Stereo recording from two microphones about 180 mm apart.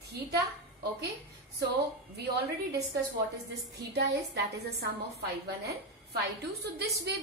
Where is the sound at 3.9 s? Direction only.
65° right (ahead or behind).